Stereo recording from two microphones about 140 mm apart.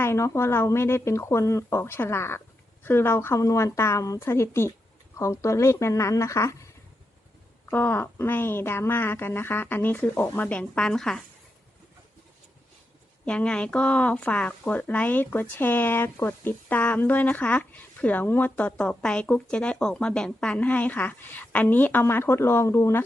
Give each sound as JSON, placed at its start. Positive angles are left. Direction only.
{"t": 0.0, "sound": "speech", "side_deg": 20}
{"t": 7.7, "sound": "speech", "side_deg": 15}
{"t": 13.2, "sound": "speech", "side_deg": 10}